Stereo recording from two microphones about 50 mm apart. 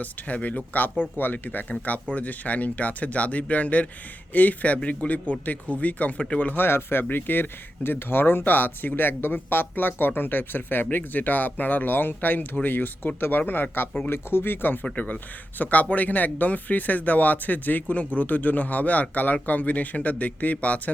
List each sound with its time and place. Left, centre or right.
0.0 s speech: left
6.6 s speech: left
14.1 s speech: left
14.8 s speech: left